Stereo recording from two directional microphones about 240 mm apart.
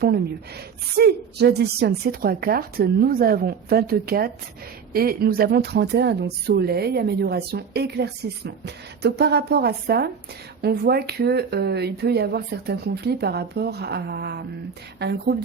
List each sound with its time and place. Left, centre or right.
0.9 s speech: right